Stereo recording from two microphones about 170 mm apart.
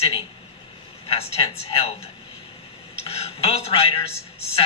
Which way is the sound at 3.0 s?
35° left (ahead or behind).